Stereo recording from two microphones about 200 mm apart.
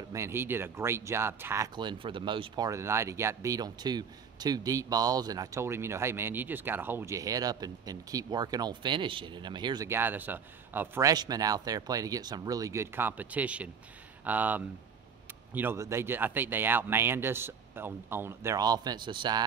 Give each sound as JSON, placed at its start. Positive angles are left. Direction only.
{"t": 0.1, "sound": "speech", "side_deg": -15}